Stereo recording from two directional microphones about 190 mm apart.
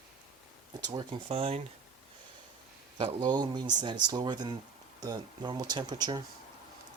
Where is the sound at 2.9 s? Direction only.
25° right (ahead or behind).